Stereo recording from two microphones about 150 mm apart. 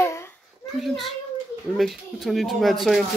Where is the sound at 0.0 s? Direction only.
15° left (ahead or behind).